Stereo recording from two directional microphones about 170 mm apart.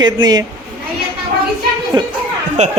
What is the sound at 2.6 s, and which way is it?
Speech, 45° right (ahead or behind).